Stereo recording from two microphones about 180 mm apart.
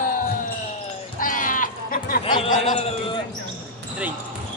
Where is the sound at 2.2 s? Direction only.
30° left (ahead or behind).